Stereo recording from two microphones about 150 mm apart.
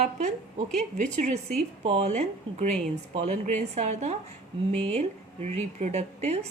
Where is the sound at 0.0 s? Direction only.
55° right (ahead or behind).